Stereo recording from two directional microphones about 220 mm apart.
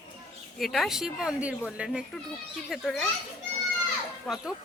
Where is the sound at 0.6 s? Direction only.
Centre (ahead or behind).